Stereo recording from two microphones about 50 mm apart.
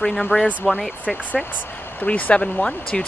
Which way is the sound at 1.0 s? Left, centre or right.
Left.